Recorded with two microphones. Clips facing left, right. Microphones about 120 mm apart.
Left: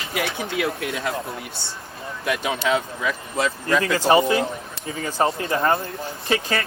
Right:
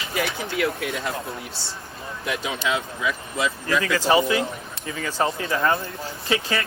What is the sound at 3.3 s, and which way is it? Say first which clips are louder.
Speech: left 3 dB; 45° left (ahead or behind).